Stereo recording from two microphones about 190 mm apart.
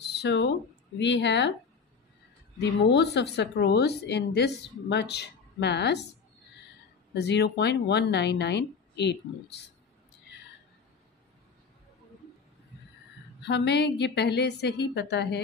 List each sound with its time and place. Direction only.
0.0 s a sound: 65° left (ahead or behind)
0.9 s speech: 70° left (ahead or behind)
2.6 s a woman's voice: 65° left (ahead or behind)
7.2 s a woman's voice: 60° left (ahead or behind)
13.4 s a woman's voice: 65° left (ahead or behind)